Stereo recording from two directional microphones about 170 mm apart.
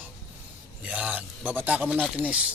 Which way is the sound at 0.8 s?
5° right (ahead or behind).